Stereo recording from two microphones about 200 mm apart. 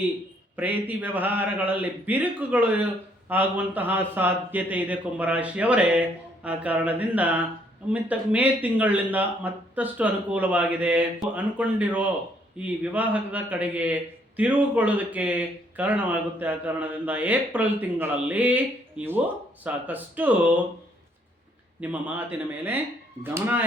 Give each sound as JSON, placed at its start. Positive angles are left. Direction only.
{"t": 0.5, "sound": "a man's voice", "side_deg": -10}
{"t": 21.8, "sound": "a man's voice", "side_deg": -10}